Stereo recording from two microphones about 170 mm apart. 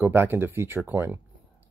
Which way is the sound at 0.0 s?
10° right (ahead or behind).